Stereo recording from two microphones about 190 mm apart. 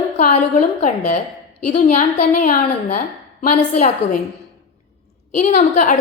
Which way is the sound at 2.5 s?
45° left (ahead or behind).